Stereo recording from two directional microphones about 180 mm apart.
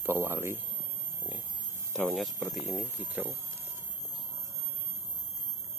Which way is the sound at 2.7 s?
10° right (ahead or behind).